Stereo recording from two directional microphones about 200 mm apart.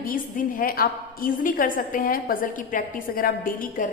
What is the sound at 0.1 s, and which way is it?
A woman's voice, 45° left (ahead or behind).